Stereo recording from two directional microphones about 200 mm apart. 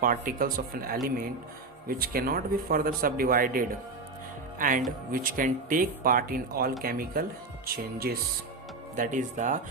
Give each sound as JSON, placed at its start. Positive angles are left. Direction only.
{"t": 0.0, "sound": "speech", "side_deg": -45}